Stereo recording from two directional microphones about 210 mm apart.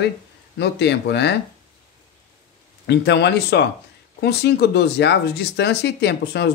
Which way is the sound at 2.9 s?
55° left (ahead or behind).